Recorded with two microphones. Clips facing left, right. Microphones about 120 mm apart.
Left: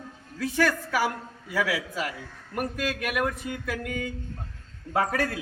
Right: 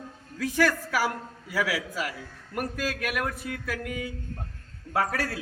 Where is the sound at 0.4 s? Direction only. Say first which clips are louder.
Even; 10° right (ahead or behind).